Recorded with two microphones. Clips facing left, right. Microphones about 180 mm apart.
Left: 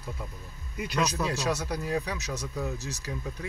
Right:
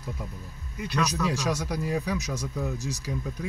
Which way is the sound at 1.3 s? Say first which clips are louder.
Right 1 dB; 15° right (ahead or behind).